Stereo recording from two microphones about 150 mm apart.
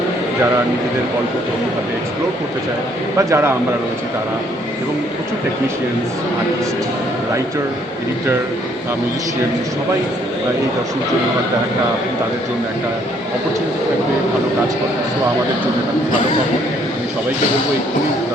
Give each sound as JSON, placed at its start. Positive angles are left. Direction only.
{"t": 3.2, "sound": "a man's voice", "side_deg": -20}